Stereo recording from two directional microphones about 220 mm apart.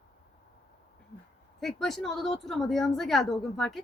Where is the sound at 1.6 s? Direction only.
Centre (ahead or behind).